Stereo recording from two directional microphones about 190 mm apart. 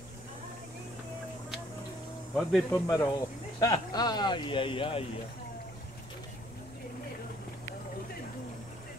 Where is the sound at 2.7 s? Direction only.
15° left (ahead or behind).